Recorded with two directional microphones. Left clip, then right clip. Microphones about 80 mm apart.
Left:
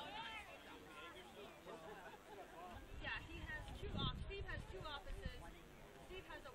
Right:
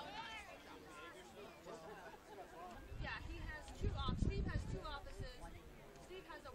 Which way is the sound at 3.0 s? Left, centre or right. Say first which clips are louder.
Left 1 dB; right.